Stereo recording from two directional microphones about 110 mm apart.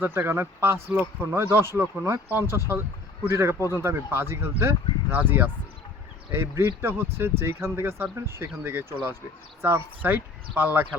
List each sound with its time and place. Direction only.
0.0 s speech: 20° right (ahead or behind)
3.6 s speech: 30° left (ahead or behind)
3.8 s speech: 20° right (ahead or behind)